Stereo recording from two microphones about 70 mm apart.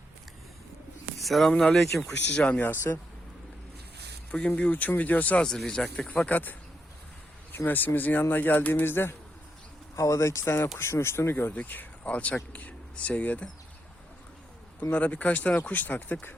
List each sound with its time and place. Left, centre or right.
1.2 s speech: centre
2.4 s speech: centre
2.6 s speech: left
4.3 s speech: centre
5.5 s speech: centre
6.1 s speech: left
9.9 s speech: left
14.8 s speech: centre